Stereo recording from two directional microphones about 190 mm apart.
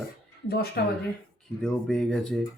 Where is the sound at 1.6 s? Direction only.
5° left (ahead or behind).